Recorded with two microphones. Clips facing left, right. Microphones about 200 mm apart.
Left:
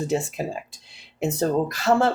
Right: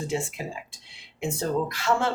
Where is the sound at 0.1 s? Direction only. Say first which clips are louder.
Left 5 dB; 40° left (ahead or behind).